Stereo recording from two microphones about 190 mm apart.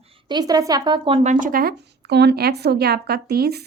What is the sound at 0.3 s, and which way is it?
Speech, 20° right (ahead or behind).